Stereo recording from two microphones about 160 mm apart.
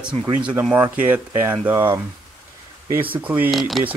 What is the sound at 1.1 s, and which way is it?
Speech, 15° right (ahead or behind).